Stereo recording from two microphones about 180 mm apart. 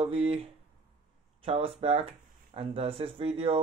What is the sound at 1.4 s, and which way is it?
Speech, 35° right (ahead or behind).